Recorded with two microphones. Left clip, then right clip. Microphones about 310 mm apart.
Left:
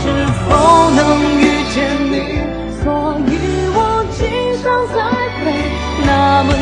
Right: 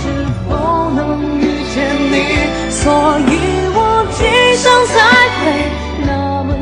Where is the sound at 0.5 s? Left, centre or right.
Left.